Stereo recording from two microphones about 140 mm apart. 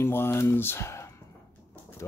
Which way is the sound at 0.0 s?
15° left (ahead or behind).